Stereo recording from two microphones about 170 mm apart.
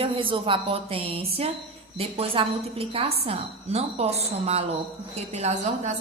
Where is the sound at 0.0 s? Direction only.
30° right (ahead or behind).